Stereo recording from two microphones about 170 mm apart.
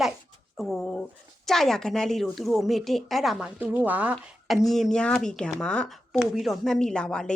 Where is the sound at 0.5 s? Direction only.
Centre (ahead or behind).